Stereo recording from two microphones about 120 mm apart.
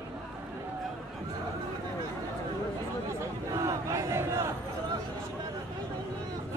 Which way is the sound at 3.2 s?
25° right (ahead or behind).